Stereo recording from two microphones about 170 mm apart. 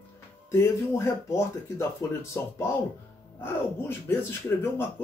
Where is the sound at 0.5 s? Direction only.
15° left (ahead or behind).